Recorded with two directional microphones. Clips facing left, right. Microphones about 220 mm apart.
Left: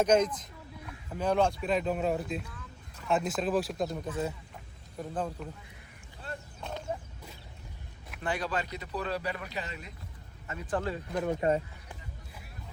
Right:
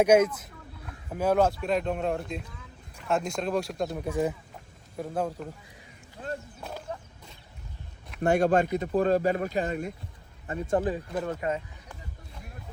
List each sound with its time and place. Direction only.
0.0 s speech: 10° right (ahead or behind)
4.0 s speech: 15° right (ahead or behind)
6.6 s a sound: 5° right (ahead or behind)
8.2 s speech: 45° right (ahead or behind)
10.4 s speech: 30° right (ahead or behind)
11.3 s speech: 35° left (ahead or behind)